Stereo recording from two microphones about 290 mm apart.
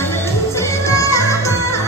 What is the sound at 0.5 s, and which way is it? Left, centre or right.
Music, centre.